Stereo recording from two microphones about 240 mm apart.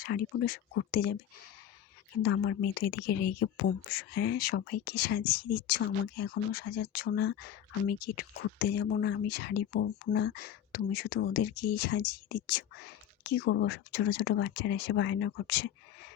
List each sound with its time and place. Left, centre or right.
0.0 s speech: left
2.2 s speech: left